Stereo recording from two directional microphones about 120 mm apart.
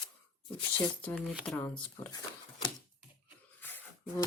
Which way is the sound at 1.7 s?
40° left (ahead or behind).